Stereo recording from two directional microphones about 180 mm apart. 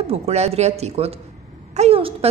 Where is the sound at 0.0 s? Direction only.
35° right (ahead or behind).